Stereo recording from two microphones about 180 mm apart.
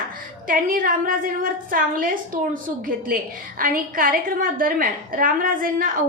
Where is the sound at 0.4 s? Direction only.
50° right (ahead or behind).